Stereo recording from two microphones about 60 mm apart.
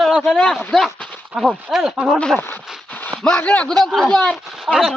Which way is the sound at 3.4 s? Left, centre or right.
Left.